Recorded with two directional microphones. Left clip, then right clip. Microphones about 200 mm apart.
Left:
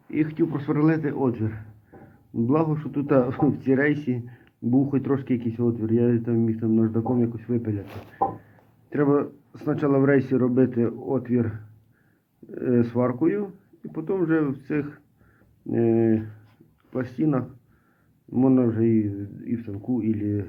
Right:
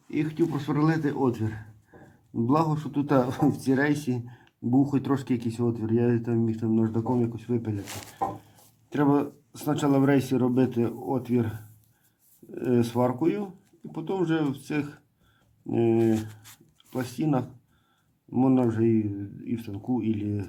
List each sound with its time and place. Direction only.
0.1 s a man's voice: 15° right (ahead or behind)
1.9 s a sound: 15° right (ahead or behind)
2.3 s speech: 15° right (ahead or behind)
8.9 s a man's voice: 20° right (ahead or behind)